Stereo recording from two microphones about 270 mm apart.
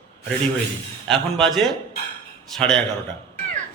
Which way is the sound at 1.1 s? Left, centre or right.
Centre.